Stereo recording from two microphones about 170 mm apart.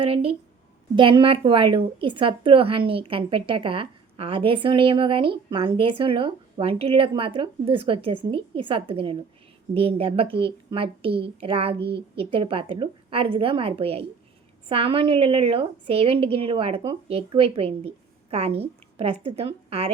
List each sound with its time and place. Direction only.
0.0 s a woman's voice: 35° right (ahead or behind)